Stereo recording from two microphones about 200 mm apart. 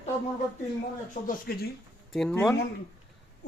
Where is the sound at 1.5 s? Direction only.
50° left (ahead or behind).